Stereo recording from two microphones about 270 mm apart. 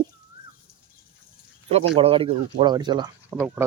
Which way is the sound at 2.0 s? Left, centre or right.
Right.